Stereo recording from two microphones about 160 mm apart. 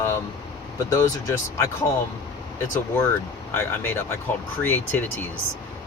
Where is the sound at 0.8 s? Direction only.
20° left (ahead or behind).